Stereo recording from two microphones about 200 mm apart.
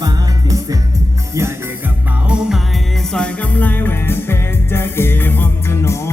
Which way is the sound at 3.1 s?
5° left (ahead or behind).